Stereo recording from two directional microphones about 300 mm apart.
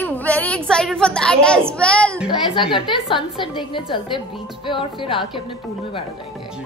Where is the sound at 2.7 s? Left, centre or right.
Centre.